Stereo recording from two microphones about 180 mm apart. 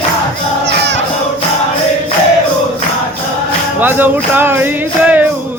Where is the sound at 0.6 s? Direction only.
75° right (ahead or behind).